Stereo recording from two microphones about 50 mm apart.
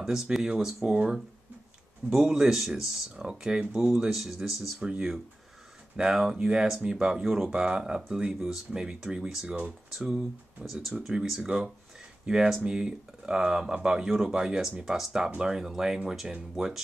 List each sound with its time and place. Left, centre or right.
0.0 s speech: centre
2.2 s speech: centre
4.7 s speech: centre
8.7 s speech: centre
10.6 s speech: centre